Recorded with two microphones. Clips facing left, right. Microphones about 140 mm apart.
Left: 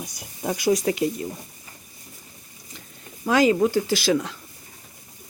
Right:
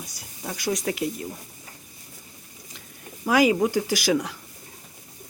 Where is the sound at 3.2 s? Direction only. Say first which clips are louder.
Left 1 dB; 10° right (ahead or behind).